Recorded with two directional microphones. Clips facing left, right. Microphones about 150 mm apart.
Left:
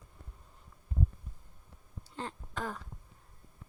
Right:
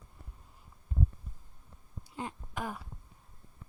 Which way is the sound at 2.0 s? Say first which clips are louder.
Right 1 dB; 10° right (ahead or behind).